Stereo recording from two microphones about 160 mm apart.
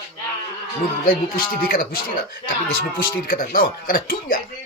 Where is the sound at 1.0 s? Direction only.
65° left (ahead or behind).